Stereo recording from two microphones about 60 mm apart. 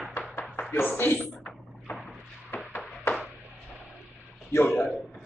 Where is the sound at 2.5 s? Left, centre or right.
Left.